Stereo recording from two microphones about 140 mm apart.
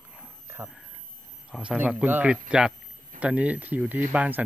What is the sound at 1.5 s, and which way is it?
Speech, 5° right (ahead or behind).